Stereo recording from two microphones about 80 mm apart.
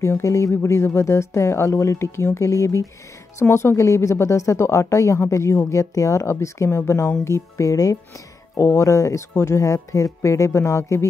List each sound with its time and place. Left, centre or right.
0.0 s speech: left
3.3 s speech: left